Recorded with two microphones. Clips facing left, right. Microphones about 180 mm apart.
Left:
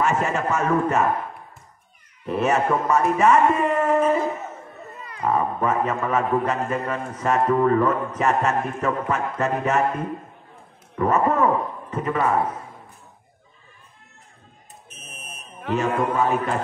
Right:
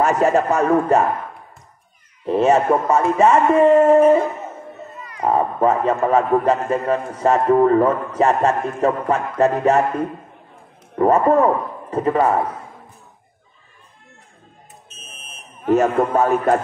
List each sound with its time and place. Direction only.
0.0 s a man's voice: 40° right (ahead or behind)
2.2 s speech: 30° right (ahead or behind)
5.2 s a man's voice: 30° right (ahead or behind)
11.0 s a man's voice: 35° right (ahead or behind)
15.6 s a man's voice: 45° right (ahead or behind)